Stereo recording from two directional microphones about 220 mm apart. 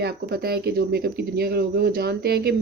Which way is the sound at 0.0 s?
45° right (ahead or behind).